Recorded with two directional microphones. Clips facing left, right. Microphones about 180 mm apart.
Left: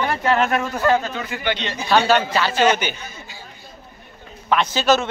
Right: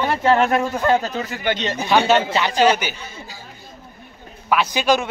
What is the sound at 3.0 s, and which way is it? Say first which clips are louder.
Speech: right 2 dB; 30° right (ahead or behind).